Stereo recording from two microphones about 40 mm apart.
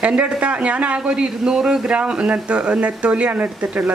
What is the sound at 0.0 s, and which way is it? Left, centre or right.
A man's voice, right.